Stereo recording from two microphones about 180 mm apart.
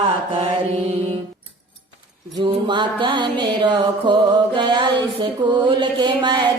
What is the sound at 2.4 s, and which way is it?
Music, 25° right (ahead or behind).